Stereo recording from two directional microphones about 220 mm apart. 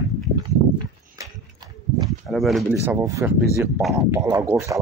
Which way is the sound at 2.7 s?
10° right (ahead or behind).